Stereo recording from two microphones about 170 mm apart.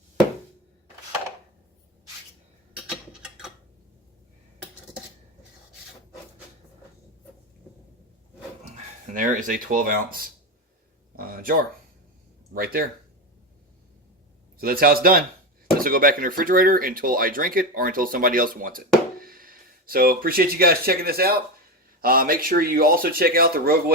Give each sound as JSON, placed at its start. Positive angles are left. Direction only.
{"t": 3.1, "sound": "typing", "side_deg": -5}
{"t": 8.6, "sound": "speech", "side_deg": -45}
{"t": 11.2, "sound": "a sound", "side_deg": -60}
{"t": 12.5, "sound": "speech", "side_deg": -60}
{"t": 14.6, "sound": "speech", "side_deg": -60}